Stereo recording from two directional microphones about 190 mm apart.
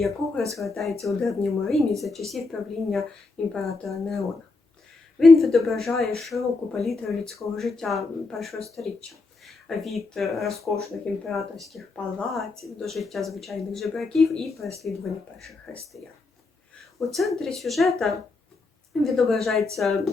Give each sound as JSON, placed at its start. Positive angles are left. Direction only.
{"t": 0.5, "sound": "speech", "side_deg": 0}
{"t": 5.4, "sound": "speech", "side_deg": 0}
{"t": 17.2, "sound": "speech", "side_deg": 0}